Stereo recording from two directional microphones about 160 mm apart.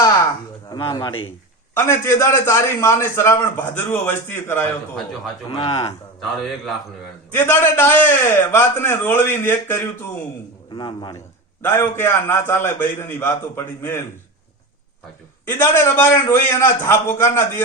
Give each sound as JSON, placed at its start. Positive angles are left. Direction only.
{"t": 0.7, "sound": "a man's voice", "side_deg": 30}
{"t": 1.7, "sound": "a man's voice", "side_deg": 15}
{"t": 5.5, "sound": "speech", "side_deg": 35}
{"t": 7.3, "sound": "a man's voice", "side_deg": 15}
{"t": 10.8, "sound": "a man's voice", "side_deg": 30}
{"t": 11.6, "sound": "a man's voice", "side_deg": 15}
{"t": 15.4, "sound": "a man's voice", "side_deg": 15}